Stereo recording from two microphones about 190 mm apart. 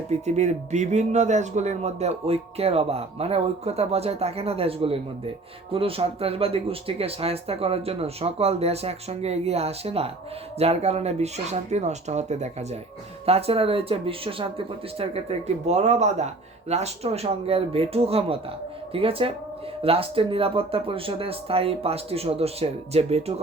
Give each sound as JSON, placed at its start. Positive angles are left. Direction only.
{"t": 0.1, "sound": "speech", "side_deg": -35}